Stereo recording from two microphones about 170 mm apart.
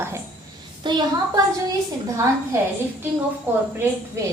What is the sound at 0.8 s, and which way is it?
Speech, 25° right (ahead or behind).